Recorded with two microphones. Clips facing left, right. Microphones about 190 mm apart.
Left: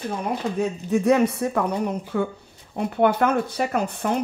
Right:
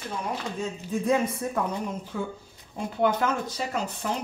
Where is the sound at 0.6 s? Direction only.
70° left (ahead or behind).